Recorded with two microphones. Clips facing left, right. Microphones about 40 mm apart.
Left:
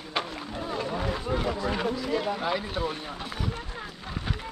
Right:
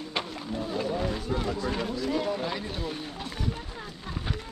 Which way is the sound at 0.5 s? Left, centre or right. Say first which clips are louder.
Right 1 dB; centre.